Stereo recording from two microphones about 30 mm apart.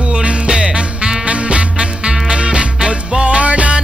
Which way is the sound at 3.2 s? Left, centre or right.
Right.